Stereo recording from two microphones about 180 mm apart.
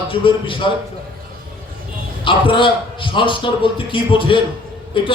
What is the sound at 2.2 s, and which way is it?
A man's voice, 30° left (ahead or behind).